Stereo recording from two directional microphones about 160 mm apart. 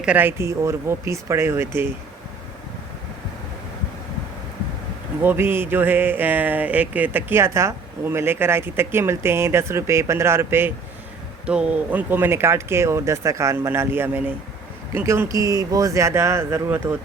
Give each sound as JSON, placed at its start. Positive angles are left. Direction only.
{"t": 0.0, "sound": "speech", "side_deg": -10}
{"t": 5.2, "sound": "speech", "side_deg": -15}